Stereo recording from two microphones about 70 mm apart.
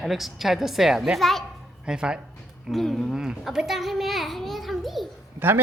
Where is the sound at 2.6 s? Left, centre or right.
Centre.